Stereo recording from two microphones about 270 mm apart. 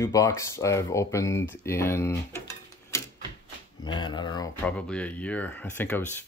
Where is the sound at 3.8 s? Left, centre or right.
Centre.